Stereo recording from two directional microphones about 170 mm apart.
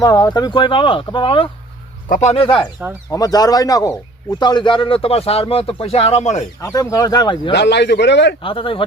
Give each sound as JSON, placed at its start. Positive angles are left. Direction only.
{"t": 0.0, "sound": "speech", "side_deg": 25}
{"t": 2.0, "sound": "speech", "side_deg": 50}
{"t": 2.3, "sound": "speech", "side_deg": 30}
{"t": 3.1, "sound": "speech", "side_deg": 20}
{"t": 6.6, "sound": "speech", "side_deg": 20}
{"t": 7.5, "sound": "a man's voice", "side_deg": 90}
{"t": 8.4, "sound": "speech", "side_deg": 30}